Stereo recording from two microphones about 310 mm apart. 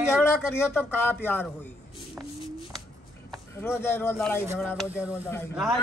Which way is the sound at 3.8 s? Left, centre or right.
Centre.